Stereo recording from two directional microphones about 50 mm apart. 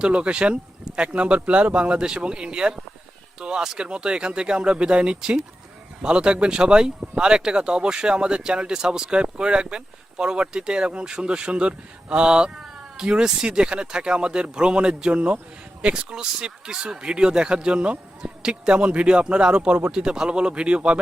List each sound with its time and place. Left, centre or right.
0.0 s speech: centre
12.6 s cat: centre
13.1 s speech: centre